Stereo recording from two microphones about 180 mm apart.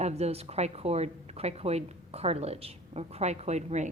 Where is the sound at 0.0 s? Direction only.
35° right (ahead or behind).